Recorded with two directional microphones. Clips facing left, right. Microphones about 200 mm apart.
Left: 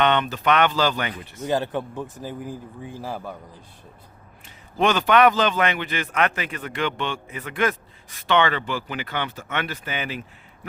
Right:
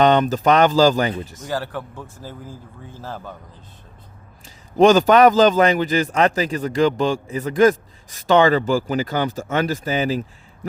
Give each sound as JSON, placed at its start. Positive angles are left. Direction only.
{"t": 0.0, "sound": "a man's voice", "side_deg": -40}
{"t": 1.5, "sound": "speech", "side_deg": 20}
{"t": 4.8, "sound": "a man's voice", "side_deg": -40}